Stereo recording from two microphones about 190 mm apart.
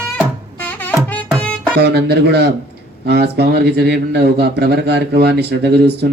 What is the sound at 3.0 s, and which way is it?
A man's voice, 60° right (ahead or behind).